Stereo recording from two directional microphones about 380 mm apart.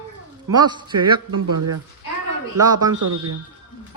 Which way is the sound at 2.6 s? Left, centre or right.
Right.